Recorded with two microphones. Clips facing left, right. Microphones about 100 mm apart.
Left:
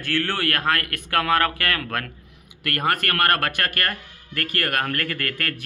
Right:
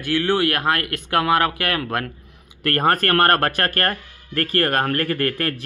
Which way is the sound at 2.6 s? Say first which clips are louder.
Right 5 dB; 35° right (ahead or behind).